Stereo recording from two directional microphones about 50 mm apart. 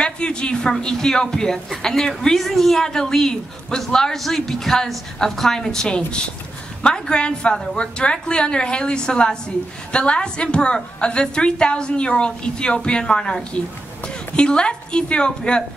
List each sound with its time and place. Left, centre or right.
0.0 s a man's voice: centre